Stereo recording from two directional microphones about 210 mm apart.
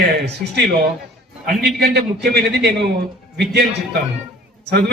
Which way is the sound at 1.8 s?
50° right (ahead or behind).